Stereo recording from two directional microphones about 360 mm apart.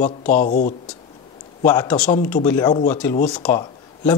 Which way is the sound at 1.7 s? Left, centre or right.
Centre.